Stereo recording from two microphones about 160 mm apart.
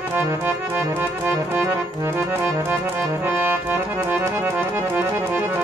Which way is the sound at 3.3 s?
15° right (ahead or behind).